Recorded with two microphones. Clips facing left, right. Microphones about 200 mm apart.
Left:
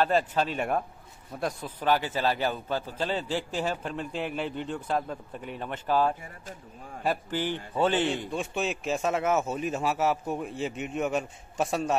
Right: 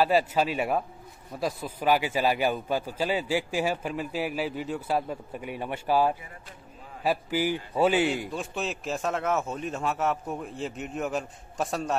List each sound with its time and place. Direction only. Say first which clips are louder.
0.0 s a man's voice: right 2 dB; 10° right (ahead or behind)